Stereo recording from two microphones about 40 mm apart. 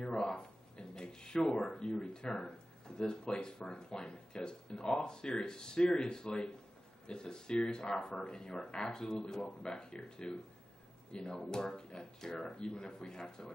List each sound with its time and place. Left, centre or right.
0.0 s a sound: left
3.0 s speech: centre
8.1 s speech: left